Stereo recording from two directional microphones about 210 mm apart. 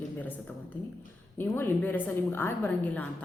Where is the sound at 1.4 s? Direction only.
10° left (ahead or behind).